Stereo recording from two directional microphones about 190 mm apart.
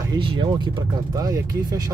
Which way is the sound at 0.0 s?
25° right (ahead or behind).